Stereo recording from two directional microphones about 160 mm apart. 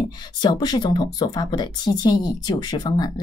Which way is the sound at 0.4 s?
25° left (ahead or behind).